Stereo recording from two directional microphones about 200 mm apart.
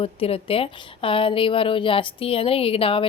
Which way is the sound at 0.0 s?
30° left (ahead or behind).